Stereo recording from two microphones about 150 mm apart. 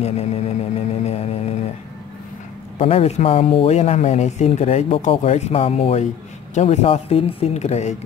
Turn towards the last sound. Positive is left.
turn(degrees=50)  # may be behind; listen again after turning